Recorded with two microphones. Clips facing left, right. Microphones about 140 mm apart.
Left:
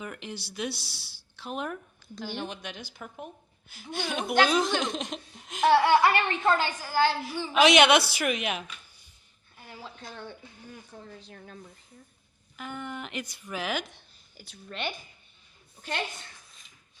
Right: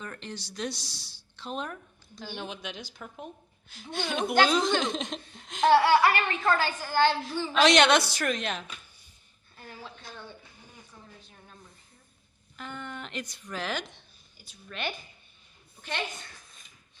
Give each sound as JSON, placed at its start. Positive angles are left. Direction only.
{"t": 0.0, "sound": "speech", "side_deg": 10}
{"t": 5.8, "sound": "a woman's voice", "side_deg": 20}
{"t": 6.8, "sound": "speech", "side_deg": 10}
{"t": 9.6, "sound": "a sound", "side_deg": 10}
{"t": 10.9, "sound": "speech", "side_deg": 80}
{"t": 12.5, "sound": "speech", "side_deg": 10}
{"t": 14.3, "sound": "speech", "side_deg": 65}